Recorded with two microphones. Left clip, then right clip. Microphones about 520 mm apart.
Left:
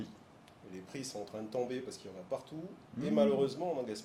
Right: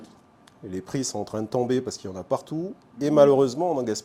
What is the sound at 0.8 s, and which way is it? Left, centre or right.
A man's voice, right.